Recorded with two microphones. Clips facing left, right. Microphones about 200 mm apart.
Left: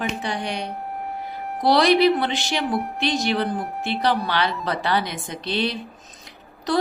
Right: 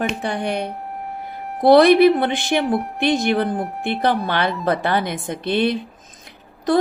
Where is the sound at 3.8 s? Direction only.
55° right (ahead or behind).